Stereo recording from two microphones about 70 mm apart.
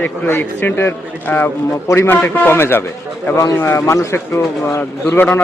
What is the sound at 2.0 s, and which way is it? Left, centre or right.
A man's voice, left.